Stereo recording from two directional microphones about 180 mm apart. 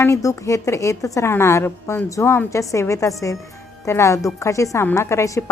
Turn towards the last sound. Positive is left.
turn(degrees=15)  # may be behind; listen again after turning